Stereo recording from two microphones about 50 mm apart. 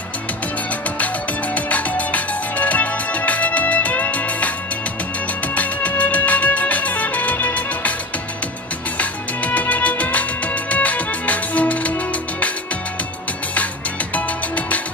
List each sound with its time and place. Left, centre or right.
0.9 s music: left
5.5 s music: left
8.9 s music: left
14.1 s music: left